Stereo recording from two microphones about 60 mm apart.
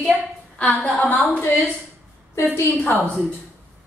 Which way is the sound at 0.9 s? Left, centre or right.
Left.